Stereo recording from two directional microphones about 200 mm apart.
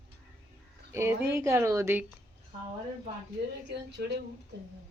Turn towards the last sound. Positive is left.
turn(degrees=-55)  # may be behind; listen again after turning